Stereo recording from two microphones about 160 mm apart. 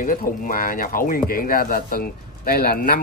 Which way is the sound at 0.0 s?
60° left (ahead or behind).